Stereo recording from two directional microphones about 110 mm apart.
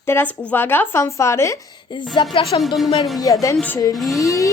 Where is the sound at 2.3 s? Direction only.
60° left (ahead or behind).